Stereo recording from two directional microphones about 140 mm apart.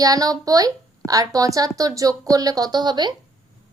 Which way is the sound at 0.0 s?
25° right (ahead or behind).